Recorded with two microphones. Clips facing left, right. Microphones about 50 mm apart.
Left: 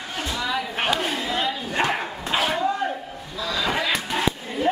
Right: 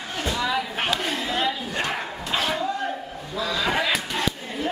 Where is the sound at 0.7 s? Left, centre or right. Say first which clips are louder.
Left 2 dB; centre.